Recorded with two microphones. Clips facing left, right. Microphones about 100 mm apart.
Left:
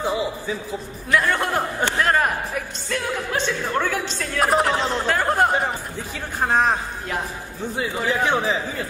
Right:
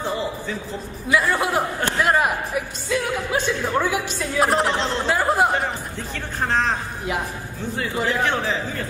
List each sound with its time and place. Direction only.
0.0 s a man's voice: 10° left (ahead or behind)
1.0 s speech: 5° right (ahead or behind)
4.4 s speech: centre (ahead or behind)
5.0 s speech: 5° right (ahead or behind)
6.4 s a man's voice: 15° left (ahead or behind)